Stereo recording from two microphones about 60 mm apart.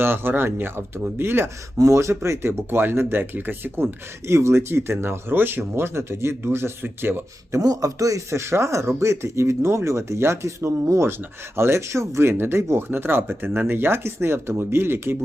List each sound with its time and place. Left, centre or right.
0.0 s speech: right
1.8 s speech: right
4.3 s speech: right
7.6 s speech: right
11.5 s speech: right
12.3 s speech: right